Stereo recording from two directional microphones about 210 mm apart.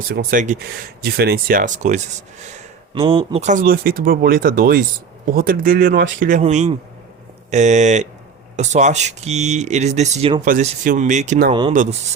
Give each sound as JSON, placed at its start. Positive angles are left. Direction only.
{"t": 0.1, "sound": "speech", "side_deg": -45}